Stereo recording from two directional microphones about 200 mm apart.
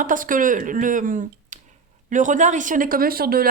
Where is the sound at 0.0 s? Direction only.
40° right (ahead or behind).